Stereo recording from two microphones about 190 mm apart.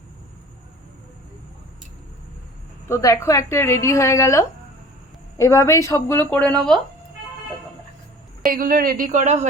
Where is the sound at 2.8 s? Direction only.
15° left (ahead or behind).